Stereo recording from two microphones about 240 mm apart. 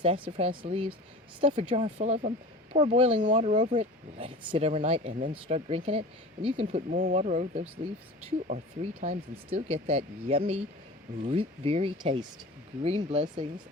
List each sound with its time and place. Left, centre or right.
0.0 s speech: right